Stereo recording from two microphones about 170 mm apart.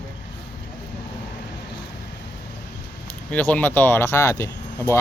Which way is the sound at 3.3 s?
10° left (ahead or behind).